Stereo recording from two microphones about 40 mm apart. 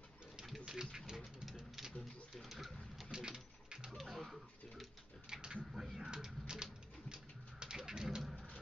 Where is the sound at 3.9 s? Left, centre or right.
Centre.